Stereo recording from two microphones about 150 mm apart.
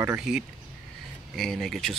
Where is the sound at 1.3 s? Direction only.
Centre (ahead or behind).